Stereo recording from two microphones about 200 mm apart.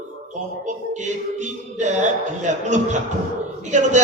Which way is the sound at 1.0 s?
35° right (ahead or behind).